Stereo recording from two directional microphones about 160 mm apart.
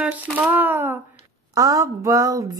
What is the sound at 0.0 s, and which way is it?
Speech, 10° right (ahead or behind).